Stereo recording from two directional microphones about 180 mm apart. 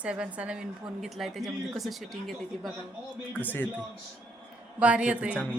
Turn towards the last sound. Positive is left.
turn(degrees=-5)  # may be behind; listen again after turning